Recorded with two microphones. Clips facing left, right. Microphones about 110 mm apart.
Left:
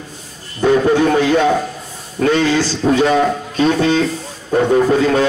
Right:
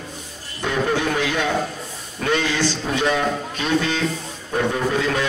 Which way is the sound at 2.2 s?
40° left (ahead or behind).